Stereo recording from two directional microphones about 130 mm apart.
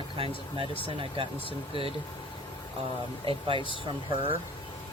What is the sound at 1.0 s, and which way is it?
Speech, 45° right (ahead or behind).